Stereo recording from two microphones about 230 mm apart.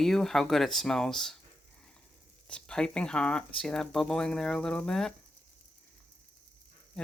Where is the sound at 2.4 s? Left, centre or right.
Centre.